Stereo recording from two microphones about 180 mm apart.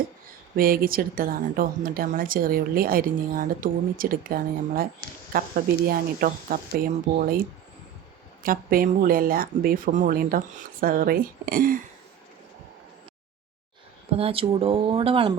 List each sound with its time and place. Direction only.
0.5 s speech: 55° right (ahead or behind)
8.4 s speech: 55° right (ahead or behind)
14.1 s speech: 30° right (ahead or behind)